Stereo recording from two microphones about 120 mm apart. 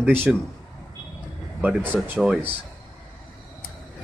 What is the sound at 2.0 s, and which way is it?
Speech, 15° right (ahead or behind).